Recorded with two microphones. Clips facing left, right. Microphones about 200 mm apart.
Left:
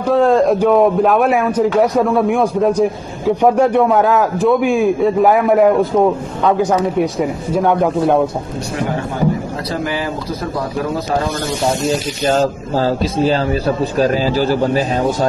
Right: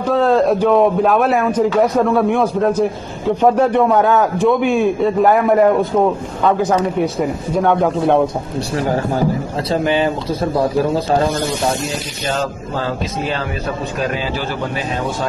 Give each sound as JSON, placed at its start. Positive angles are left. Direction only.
{"t": 0.1, "sound": "a man's voice", "side_deg": 0}
{"t": 9.7, "sound": "speech", "side_deg": -25}
{"t": 12.3, "sound": "a man's voice", "side_deg": 35}